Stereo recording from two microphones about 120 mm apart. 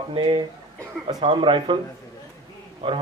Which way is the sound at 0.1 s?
45° right (ahead or behind).